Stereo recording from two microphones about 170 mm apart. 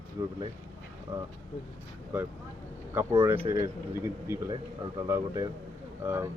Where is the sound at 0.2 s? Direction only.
25° right (ahead or behind).